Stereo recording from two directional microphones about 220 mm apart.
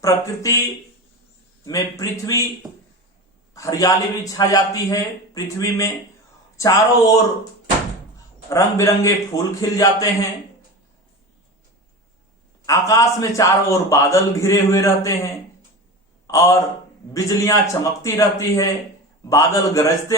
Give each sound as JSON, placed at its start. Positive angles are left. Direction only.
{"t": 0.0, "sound": "a man's voice", "side_deg": 15}
{"t": 1.6, "sound": "a man's voice", "side_deg": 15}
{"t": 3.5, "sound": "a man's voice", "side_deg": 15}
{"t": 8.4, "sound": "a man's voice", "side_deg": 15}
{"t": 12.6, "sound": "a man's voice", "side_deg": 15}